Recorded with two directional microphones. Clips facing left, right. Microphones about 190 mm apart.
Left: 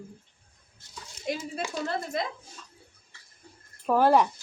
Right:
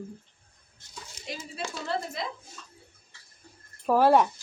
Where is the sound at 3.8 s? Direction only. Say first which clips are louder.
Right 1 dB; centre (ahead or behind).